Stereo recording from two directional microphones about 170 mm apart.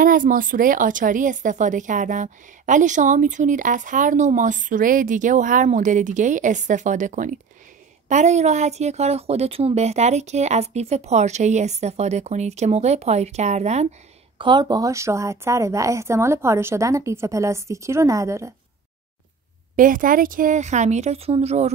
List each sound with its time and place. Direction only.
0.0 s a woman's voice: 55° right (ahead or behind)
14.4 s a woman's voice: 25° right (ahead or behind)
19.7 s a woman's voice: 50° right (ahead or behind)